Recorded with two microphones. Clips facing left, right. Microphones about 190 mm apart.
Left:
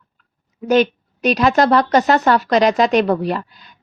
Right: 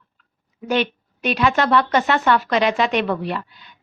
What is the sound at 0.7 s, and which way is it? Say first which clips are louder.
A woman's voice: left 7 dB; 40° left (ahead or behind).